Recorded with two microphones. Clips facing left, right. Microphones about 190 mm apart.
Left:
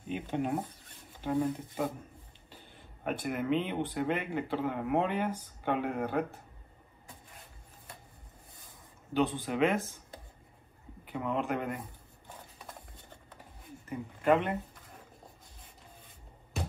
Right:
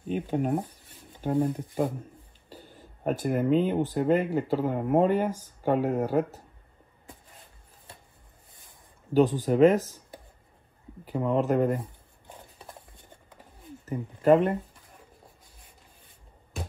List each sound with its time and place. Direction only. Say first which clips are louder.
0.0 s speech: right 5 dB; 40° right (ahead or behind)
2.5 s a sound: right 7 dB; 40° right (ahead or behind)
3.9 s speech: right 8 dB; 40° right (ahead or behind)
9.1 s speech: right 8 dB; 40° right (ahead or behind)
11.1 s speech: right 7 dB; 35° right (ahead or behind)
12.3 s a sound: right 2 dB; 20° right (ahead or behind)
13.8 s speech: right 6 dB; 40° right (ahead or behind)